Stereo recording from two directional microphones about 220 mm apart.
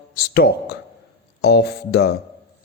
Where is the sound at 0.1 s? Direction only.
45° left (ahead or behind).